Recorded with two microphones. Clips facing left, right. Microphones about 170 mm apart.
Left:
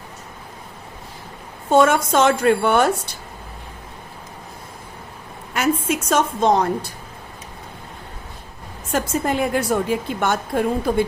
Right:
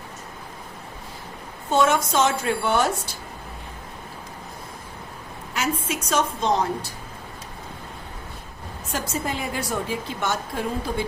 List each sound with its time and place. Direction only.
1.7 s a woman's voice: 50° left (ahead or behind)
5.5 s a woman's voice: 55° left (ahead or behind)
8.9 s a woman's voice: 55° left (ahead or behind)